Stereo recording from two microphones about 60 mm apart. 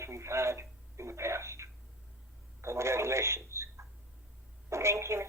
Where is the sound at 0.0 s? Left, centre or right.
Right.